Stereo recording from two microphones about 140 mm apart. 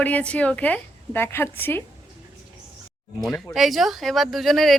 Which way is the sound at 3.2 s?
Centre (ahead or behind).